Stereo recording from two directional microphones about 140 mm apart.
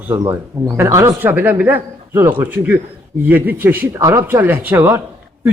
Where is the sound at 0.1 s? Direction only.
25° right (ahead or behind).